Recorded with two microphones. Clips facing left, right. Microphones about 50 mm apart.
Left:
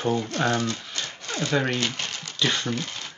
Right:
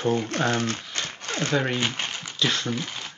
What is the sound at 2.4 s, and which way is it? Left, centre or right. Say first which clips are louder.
Speech: even; centre.